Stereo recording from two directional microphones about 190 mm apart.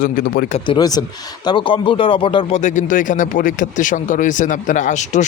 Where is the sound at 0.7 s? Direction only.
20° left (ahead or behind).